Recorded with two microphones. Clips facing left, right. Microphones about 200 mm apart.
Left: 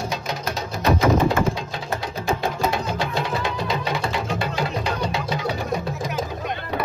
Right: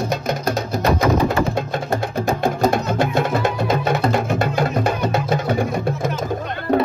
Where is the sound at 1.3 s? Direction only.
50° right (ahead or behind).